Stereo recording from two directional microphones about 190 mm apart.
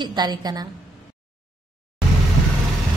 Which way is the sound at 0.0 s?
20° right (ahead or behind).